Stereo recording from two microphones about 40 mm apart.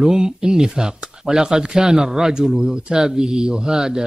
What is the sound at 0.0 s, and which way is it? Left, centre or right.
Speech, centre.